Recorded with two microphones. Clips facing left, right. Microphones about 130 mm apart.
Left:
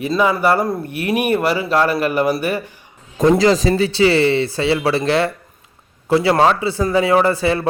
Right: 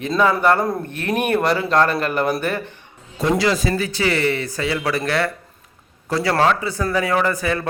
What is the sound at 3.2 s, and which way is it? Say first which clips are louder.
A man's voice: left 6 dB; 35° left (ahead or behind).